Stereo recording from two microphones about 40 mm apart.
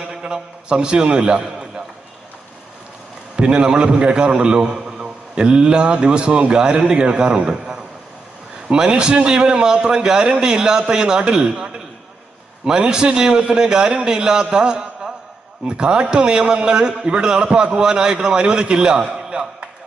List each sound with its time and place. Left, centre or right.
0.2 s a man's voice: centre
3.3 s a man's voice: right
8.7 s a man's voice: right